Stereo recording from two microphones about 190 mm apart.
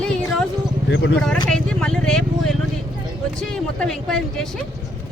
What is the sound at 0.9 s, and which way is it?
Speech, 70° left (ahead or behind).